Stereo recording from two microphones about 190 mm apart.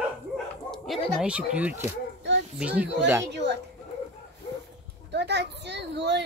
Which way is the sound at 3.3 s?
65° right (ahead or behind).